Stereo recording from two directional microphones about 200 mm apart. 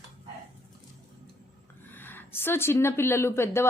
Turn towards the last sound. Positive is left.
turn(degrees=15)  # may be behind; listen again after turning